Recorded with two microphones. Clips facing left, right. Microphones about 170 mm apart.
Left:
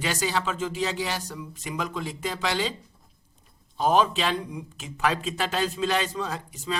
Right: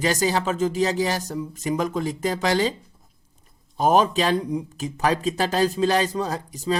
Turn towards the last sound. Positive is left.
turn(degrees=-40)  # may be behind; listen again after turning